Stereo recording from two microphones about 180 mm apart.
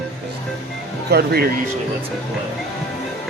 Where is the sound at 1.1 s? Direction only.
65° right (ahead or behind).